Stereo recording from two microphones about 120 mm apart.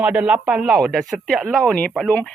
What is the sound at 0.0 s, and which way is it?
A woman's voice, 10° right (ahead or behind).